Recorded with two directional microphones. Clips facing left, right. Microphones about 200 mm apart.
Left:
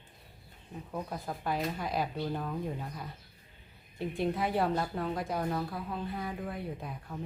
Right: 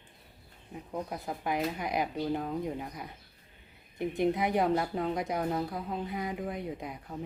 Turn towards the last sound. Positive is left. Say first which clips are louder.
# right 2 dB
turn(degrees=-20)  # may be behind; listen again after turning